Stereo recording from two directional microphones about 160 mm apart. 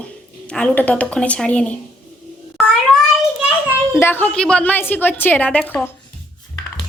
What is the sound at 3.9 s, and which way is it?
A woman's voice, 15° left (ahead or behind).